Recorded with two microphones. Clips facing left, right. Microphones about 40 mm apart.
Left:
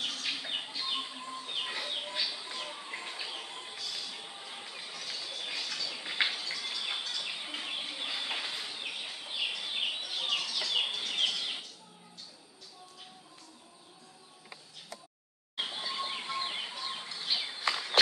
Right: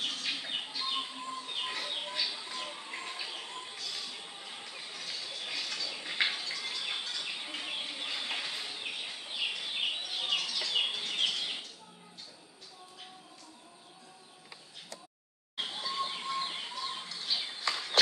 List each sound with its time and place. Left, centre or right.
0.0 s bird: centre
5.6 s a sound: centre
6.2 s bird: centre
8.0 s a sound: centre
10.9 s bird: centre
15.5 s bird: left